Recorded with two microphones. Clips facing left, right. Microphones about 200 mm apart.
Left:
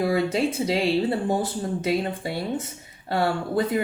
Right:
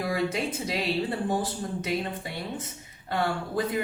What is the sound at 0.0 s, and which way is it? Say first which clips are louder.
Speech: left 6 dB; 25° left (ahead or behind).